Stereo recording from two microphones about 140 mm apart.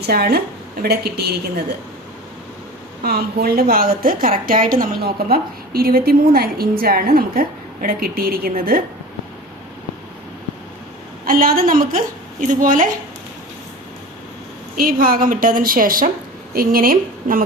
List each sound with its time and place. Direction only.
0.1 s a woman's voice: 90° right
3.0 s a woman's voice: 90° right
11.3 s a woman's voice: 90° right; by 12.9 s 70° right (ahead or behind)
14.8 s a woman's voice: 90° right